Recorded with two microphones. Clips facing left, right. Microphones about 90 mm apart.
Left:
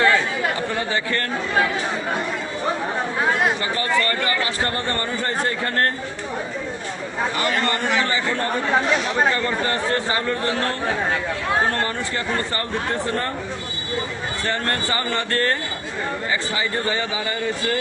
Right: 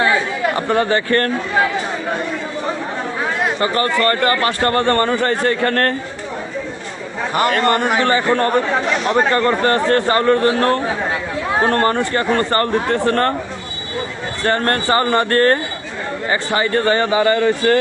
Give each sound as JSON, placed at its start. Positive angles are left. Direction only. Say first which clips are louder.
{"t": 0.7, "sound": "speech", "louder": "right 8 dB", "side_deg": -55}
{"t": 3.6, "sound": "a man's voice", "louder": "right 5 dB", "side_deg": -55}
{"t": 7.3, "sound": "speech", "louder": "right 10 dB", "side_deg": -50}
{"t": 12.9, "sound": "a man's voice", "louder": "right 7 dB", "side_deg": -65}
{"t": 14.4, "sound": "speech", "louder": "right 8 dB", "side_deg": -50}
{"t": 16.5, "sound": "speech", "louder": "right 8 dB", "side_deg": -65}